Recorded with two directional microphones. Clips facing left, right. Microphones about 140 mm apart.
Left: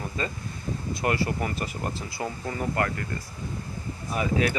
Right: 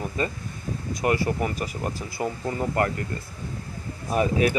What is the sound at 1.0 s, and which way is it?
Speech, 20° right (ahead or behind).